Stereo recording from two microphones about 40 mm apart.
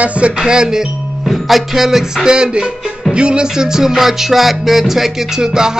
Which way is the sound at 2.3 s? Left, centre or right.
Centre.